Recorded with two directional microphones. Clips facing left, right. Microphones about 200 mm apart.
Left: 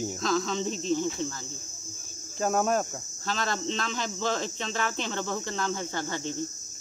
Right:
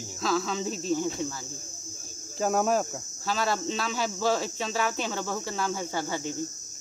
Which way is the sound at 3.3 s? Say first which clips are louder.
Right 2 dB; 5° right (ahead or behind).